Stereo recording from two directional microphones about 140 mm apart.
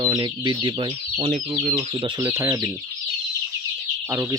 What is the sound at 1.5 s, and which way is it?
Speech, 20° right (ahead or behind).